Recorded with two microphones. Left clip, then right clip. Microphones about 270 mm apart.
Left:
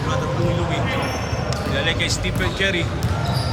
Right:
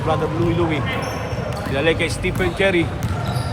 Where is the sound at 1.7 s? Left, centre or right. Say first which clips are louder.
Right 3 dB; right.